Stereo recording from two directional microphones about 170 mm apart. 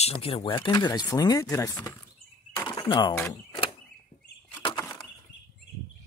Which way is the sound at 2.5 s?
20° left (ahead or behind).